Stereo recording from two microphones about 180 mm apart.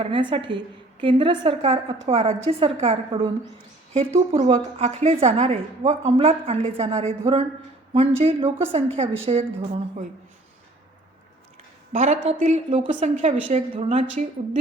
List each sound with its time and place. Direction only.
0.0 s a woman's voice: 25° right (ahead or behind)
11.9 s a woman's voice: 40° right (ahead or behind)